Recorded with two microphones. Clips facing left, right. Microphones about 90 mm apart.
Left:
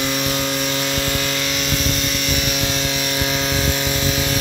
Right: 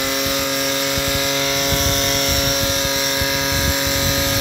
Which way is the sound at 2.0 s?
45° right (ahead or behind).